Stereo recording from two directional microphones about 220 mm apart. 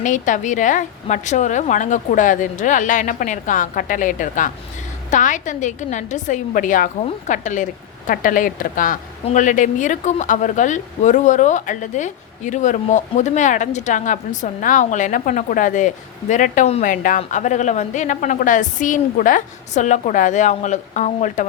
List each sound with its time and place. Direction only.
0.0 s speech: 35° left (ahead or behind)